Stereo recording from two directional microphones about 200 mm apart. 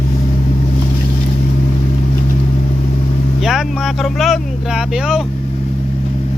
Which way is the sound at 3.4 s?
Centre (ahead or behind).